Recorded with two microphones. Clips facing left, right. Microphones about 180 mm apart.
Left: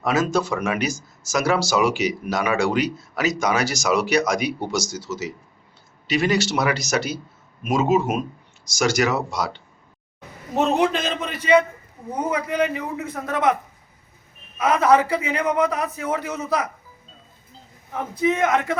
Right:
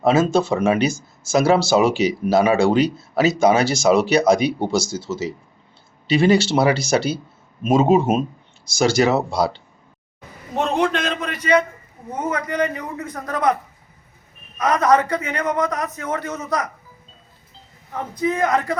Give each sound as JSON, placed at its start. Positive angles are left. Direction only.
{"t": 0.0, "sound": "speech", "side_deg": -30}
{"t": 10.5, "sound": "a man's voice", "side_deg": 5}
{"t": 14.6, "sound": "a man's voice", "side_deg": 5}
{"t": 17.9, "sound": "a man's voice", "side_deg": 5}